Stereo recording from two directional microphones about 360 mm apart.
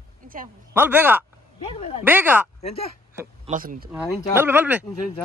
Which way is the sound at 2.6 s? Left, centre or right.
Centre.